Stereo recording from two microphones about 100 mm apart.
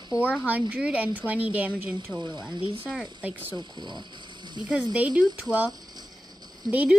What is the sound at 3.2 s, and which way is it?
Speech, 15° right (ahead or behind).